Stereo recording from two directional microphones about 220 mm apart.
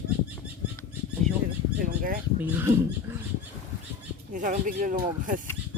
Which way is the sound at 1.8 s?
40° right (ahead or behind).